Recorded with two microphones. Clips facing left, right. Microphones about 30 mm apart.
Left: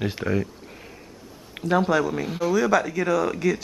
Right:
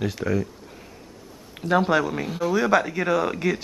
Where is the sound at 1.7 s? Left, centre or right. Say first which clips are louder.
Right 1 dB; centre.